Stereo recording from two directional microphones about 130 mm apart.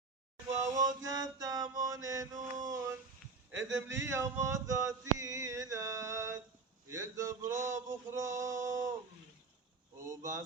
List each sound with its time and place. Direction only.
0.6 s mantra: 30° right (ahead or behind)
2.6 s a sound: 25° right (ahead or behind)
3.8 s male singing: 20° right (ahead or behind)
10.0 s male singing: 25° right (ahead or behind)